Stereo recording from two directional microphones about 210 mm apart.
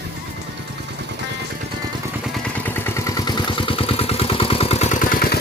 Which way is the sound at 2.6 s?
10° left (ahead or behind).